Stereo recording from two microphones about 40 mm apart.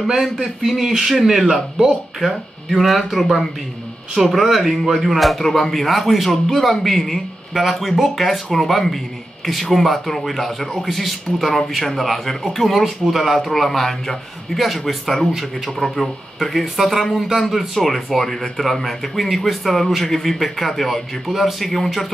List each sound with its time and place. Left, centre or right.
0.7 s speech: centre